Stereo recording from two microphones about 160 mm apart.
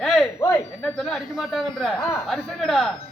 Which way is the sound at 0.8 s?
5° left (ahead or behind).